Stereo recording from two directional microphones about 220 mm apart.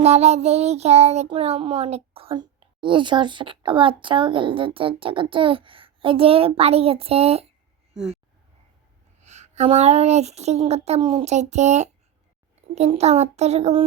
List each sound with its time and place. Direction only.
0.0 s child singing: 30° right (ahead or behind)
7.9 s speech: 5° right (ahead or behind)
9.2 s child singing: 30° right (ahead or behind)